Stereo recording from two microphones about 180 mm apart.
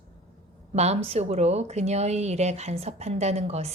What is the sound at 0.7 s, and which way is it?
A woman's voice, 35° right (ahead or behind).